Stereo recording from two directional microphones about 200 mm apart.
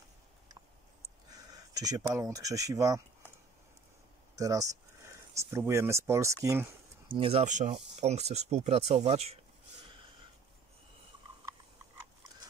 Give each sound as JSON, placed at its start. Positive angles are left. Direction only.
{"t": 1.3, "sound": "speech", "side_deg": -20}
{"t": 4.4, "sound": "speech", "side_deg": -15}
{"t": 7.1, "sound": "speech", "side_deg": -25}